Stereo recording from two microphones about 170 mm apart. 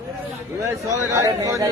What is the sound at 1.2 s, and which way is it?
Speech, 20° right (ahead or behind).